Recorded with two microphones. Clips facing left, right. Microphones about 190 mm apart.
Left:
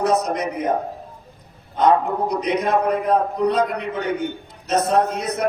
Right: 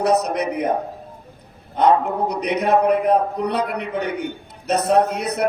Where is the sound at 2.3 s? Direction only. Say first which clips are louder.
Right 2 dB; 65° right (ahead or behind).